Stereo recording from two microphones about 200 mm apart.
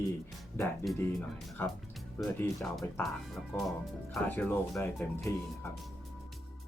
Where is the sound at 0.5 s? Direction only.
10° left (ahead or behind).